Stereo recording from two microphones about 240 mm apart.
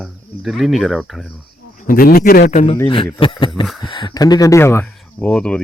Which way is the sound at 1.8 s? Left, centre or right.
Left.